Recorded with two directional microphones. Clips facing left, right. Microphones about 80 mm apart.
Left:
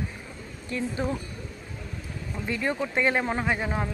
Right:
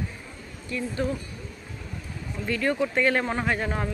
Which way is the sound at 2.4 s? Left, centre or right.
Centre.